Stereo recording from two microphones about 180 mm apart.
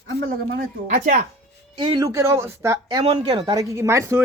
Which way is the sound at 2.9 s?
30° right (ahead or behind).